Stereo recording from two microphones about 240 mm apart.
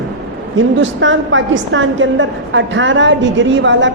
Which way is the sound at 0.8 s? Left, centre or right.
Right.